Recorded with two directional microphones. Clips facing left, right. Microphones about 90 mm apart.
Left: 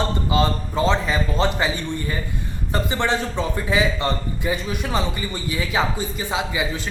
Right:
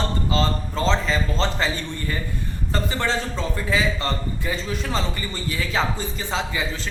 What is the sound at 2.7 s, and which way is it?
A man's voice, 20° left (ahead or behind).